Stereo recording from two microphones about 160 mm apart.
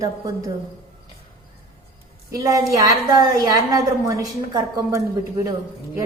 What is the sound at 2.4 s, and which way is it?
A woman's voice, 20° right (ahead or behind).